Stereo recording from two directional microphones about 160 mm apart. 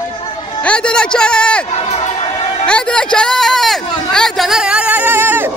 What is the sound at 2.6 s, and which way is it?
Speech, 5° left (ahead or behind).